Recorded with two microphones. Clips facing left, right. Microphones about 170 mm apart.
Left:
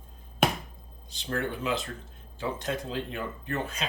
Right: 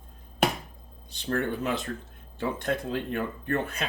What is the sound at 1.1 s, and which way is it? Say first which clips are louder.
Speech: right 3 dB; 55° right (ahead or behind).